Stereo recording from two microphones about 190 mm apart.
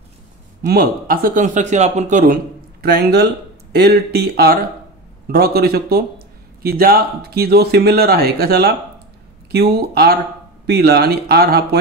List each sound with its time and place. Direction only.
0.6 s a man's voice: 55° right (ahead or behind)